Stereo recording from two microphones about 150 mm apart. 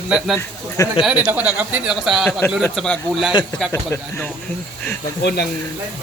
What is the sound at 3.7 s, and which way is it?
Speech, 15° left (ahead or behind).